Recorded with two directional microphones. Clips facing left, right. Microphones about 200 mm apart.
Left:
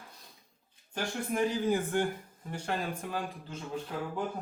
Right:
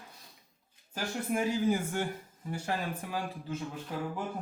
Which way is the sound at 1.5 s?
10° right (ahead or behind).